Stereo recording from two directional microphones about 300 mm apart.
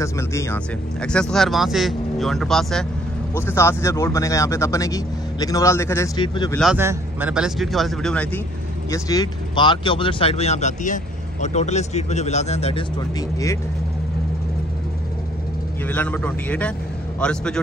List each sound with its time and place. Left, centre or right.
0.0 s speech: centre
6.5 s speech: centre; by 12.8 s left
15.9 s speech: centre